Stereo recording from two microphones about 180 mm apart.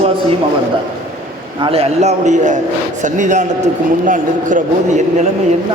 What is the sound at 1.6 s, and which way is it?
A man's voice, 35° right (ahead or behind).